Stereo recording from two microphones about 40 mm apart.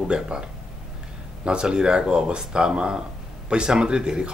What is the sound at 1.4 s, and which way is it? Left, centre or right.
Speech, right.